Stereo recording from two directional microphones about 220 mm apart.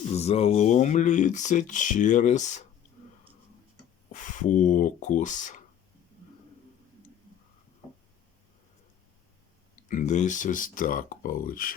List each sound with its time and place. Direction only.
0.1 s speech: 30° left (ahead or behind)
4.1 s speech: 35° left (ahead or behind)
9.9 s speech: 35° left (ahead or behind)